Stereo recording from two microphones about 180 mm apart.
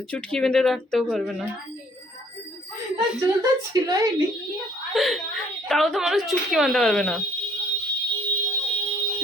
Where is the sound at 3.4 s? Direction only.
20° right (ahead or behind).